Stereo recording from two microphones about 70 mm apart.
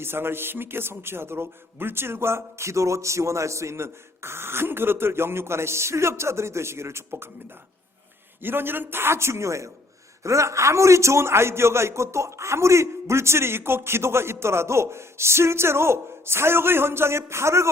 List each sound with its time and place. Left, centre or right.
0.0 s a man's voice: right
8.4 s a man's voice: right